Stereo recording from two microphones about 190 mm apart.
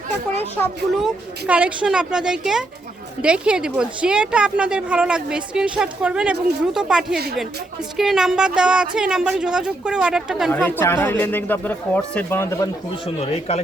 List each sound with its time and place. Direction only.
1.0 s a woman's voice: 5° right (ahead or behind)
10.5 s speech: 10° left (ahead or behind)
13.1 s speech: 30° left (ahead or behind)